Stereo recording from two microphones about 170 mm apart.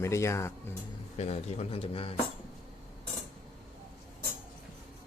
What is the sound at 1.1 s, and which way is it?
Speech, 40° left (ahead or behind).